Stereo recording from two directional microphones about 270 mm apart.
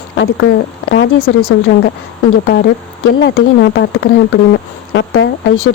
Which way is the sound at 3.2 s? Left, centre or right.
Left.